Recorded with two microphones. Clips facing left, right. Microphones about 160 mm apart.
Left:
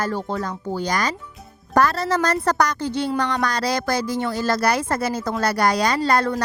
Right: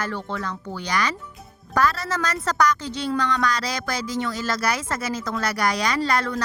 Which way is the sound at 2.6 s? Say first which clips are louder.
Left 1 dB; 60° left (ahead or behind).